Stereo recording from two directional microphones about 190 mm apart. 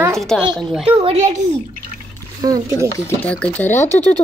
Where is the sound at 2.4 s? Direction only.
15° right (ahead or behind).